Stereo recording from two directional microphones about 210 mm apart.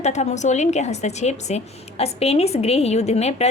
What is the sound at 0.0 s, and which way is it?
A woman's voice, 35° left (ahead or behind).